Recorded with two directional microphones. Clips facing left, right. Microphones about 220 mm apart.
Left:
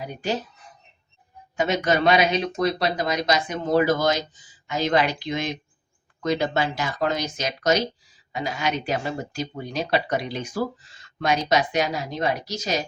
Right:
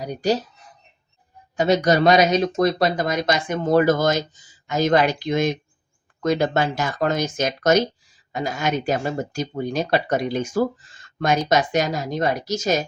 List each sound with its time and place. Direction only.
0.0 s speech: 40° right (ahead or behind)
1.5 s speech: 35° right (ahead or behind)